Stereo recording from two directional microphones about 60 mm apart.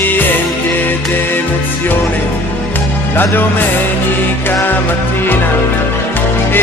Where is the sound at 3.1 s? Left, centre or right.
Left.